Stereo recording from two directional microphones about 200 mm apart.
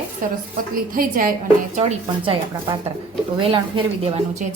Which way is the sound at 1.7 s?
30° right (ahead or behind).